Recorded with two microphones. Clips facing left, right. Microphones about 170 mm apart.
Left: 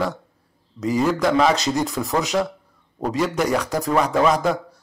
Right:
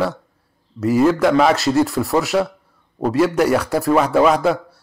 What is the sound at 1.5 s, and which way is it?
Speech, 15° left (ahead or behind).